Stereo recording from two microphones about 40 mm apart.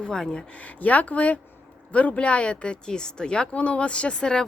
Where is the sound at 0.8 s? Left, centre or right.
Left.